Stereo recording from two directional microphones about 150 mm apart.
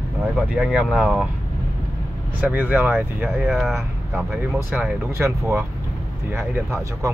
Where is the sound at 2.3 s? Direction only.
10° right (ahead or behind).